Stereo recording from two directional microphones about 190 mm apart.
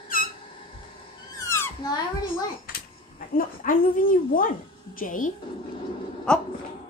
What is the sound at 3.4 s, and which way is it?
A woman's voice, 50° left (ahead or behind).